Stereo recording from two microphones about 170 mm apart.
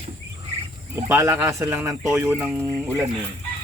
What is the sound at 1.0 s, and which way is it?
Speech, 15° right (ahead or behind).